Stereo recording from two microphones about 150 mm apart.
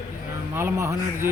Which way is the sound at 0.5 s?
15° right (ahead or behind).